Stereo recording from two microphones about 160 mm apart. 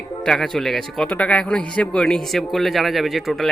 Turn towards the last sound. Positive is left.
turn(degrees=0)  # may be behind; listen again after turning